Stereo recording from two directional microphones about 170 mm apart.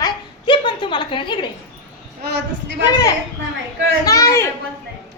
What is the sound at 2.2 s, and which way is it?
Speech, 90° right.